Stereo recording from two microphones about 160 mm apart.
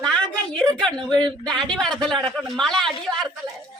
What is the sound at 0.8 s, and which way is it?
Speech, 5° left (ahead or behind).